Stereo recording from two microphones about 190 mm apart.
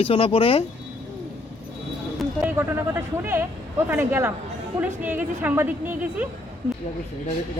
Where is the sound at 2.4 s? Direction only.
10° right (ahead or behind).